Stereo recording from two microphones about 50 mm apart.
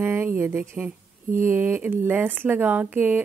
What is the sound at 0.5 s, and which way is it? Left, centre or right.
Speech, right.